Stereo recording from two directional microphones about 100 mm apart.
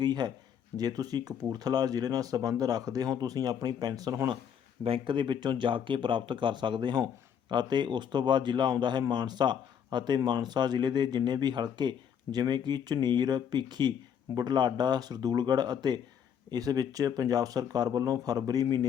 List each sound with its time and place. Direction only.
0.0 s speech: 45° right (ahead or behind)
4.8 s speech: 60° right (ahead or behind); by 18.9 s 40° right (ahead or behind)